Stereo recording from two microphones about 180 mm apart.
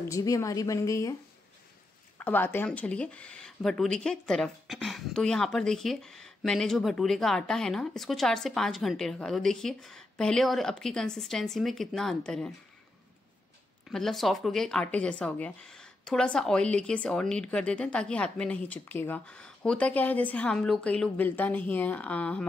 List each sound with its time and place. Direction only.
0.1 s speech: 20° left (ahead or behind)
2.1 s speech: 10° left (ahead or behind)
13.9 s speech: centre (ahead or behind)